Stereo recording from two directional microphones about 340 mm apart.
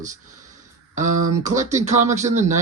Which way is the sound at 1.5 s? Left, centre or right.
Right.